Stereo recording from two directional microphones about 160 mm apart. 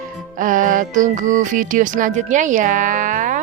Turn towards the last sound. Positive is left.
turn(degrees=-50)  # may be behind; listen again after turning